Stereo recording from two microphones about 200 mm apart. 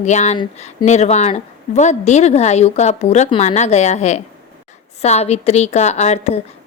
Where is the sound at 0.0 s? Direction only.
35° left (ahead or behind).